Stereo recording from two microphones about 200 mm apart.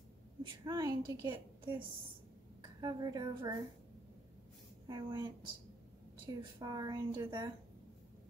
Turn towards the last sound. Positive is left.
turn(degrees=-20)  # may be behind; listen again after turning